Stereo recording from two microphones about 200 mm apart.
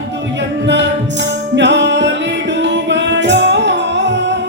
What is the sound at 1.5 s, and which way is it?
Music, 60° right (ahead or behind).